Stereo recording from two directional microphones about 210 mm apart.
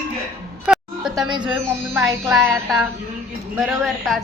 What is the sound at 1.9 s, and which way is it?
Speech, centre (ahead or behind).